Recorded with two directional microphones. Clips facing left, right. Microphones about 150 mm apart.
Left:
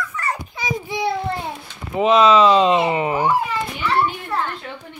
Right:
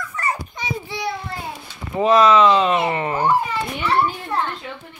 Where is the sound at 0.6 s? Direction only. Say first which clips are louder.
Left 3 dB; 15° left (ahead or behind).